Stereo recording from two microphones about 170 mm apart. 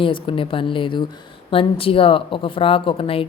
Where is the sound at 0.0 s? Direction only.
30° left (ahead or behind).